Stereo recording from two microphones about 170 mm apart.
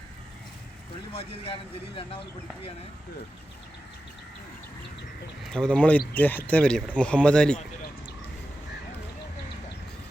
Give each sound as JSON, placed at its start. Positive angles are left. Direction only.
{"t": 1.1, "sound": "speech", "side_deg": 35}
{"t": 5.4, "sound": "speech", "side_deg": 5}